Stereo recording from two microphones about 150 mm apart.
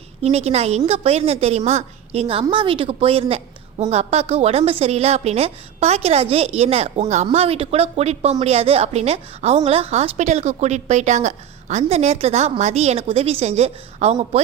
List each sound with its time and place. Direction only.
0.2 s speech: 45° right (ahead or behind)